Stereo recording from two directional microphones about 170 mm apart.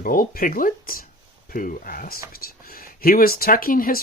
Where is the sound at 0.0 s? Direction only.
55° left (ahead or behind).